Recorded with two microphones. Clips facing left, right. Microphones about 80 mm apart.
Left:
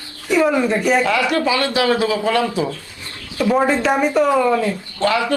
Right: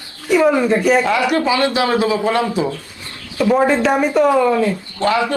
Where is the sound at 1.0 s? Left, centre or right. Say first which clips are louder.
Right 1 dB; right.